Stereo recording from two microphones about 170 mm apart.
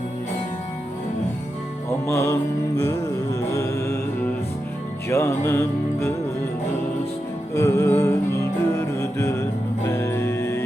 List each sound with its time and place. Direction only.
2.0 s music: 15° left (ahead or behind)
5.0 s music: 15° left (ahead or behind)
7.5 s music: 15° left (ahead or behind)